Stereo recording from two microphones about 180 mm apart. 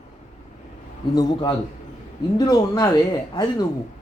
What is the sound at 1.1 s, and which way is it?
Speech, 25° left (ahead or behind).